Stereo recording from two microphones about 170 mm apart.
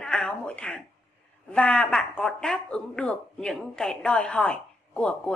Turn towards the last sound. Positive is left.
turn(degrees=5)  # may be behind; listen again after turning